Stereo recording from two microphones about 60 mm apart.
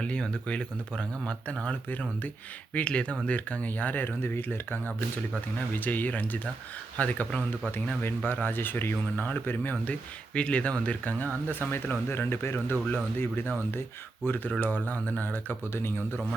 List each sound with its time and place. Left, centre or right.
0.0 s speech: centre
1.9 s speech: left
2.7 s speech: centre
8.0 s speech: left